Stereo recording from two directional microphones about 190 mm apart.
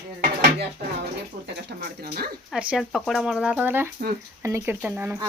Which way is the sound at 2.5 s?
5° right (ahead or behind).